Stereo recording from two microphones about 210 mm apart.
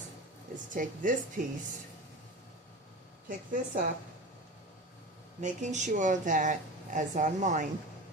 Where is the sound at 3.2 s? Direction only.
40° right (ahead or behind).